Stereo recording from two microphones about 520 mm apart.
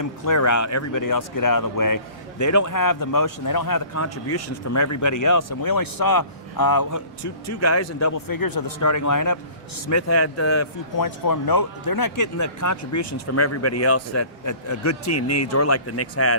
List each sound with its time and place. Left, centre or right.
0.0 s a man's voice: left
10.9 s speech: left